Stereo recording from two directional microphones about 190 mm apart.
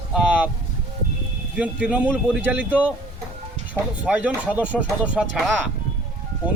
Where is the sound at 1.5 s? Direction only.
5° right (ahead or behind).